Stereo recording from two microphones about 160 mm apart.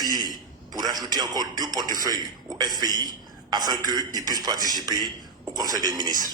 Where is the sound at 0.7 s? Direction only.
25° right (ahead or behind).